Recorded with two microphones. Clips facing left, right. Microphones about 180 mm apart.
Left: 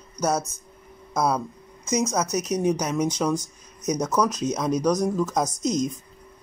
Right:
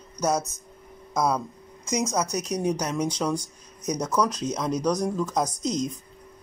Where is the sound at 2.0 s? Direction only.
15° right (ahead or behind).